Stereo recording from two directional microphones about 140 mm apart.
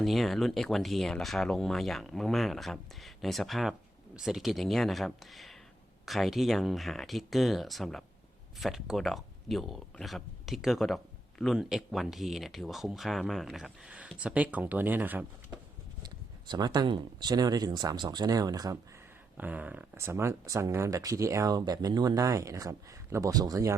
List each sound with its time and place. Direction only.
0.0 s speech: centre (ahead or behind)
16.0 s speech: 30° right (ahead or behind)
19.4 s speech: 10° right (ahead or behind)